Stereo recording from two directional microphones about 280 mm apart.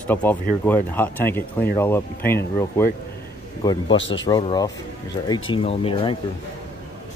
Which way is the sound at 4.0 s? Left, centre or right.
Left.